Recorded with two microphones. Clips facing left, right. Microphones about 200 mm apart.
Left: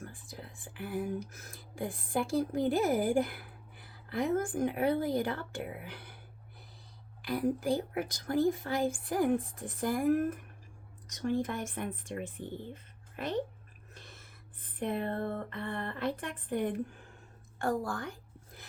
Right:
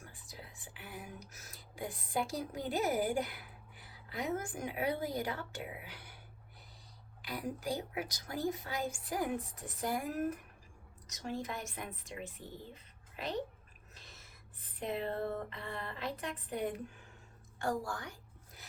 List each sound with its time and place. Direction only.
0.0 s speech: 50° left (ahead or behind)
7.2 s speech: 50° left (ahead or behind)
12.7 s a sound: 50° left (ahead or behind)